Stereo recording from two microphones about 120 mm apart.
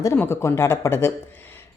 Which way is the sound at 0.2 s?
20° left (ahead or behind).